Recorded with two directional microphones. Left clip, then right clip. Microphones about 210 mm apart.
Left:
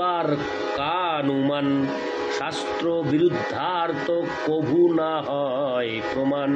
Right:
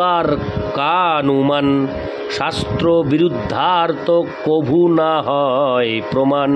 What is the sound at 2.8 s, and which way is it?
Speech, 55° right (ahead or behind).